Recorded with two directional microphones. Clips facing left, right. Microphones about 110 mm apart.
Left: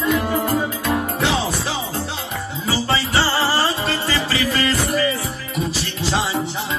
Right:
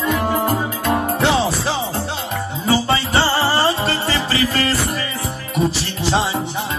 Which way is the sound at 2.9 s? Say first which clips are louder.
Right 2 dB; 25° right (ahead or behind).